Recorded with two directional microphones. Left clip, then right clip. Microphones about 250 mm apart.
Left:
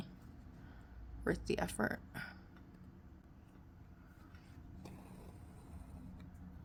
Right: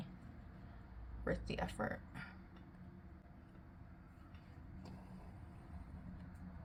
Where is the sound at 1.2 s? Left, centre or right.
Left.